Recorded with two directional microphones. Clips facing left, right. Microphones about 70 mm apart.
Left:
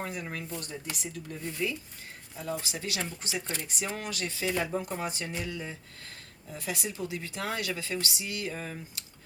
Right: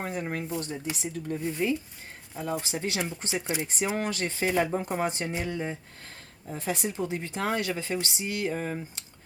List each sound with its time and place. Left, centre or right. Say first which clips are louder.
0.0 s speech: right 4 dB; right
3.4 s speech: right 6 dB; centre
3.9 s speech: right 6 dB; right